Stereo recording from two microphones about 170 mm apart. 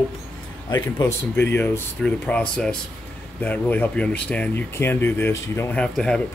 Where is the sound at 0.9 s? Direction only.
15° left (ahead or behind).